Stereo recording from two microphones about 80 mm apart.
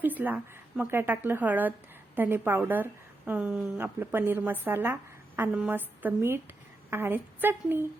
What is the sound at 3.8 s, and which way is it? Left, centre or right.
A woman's voice, right.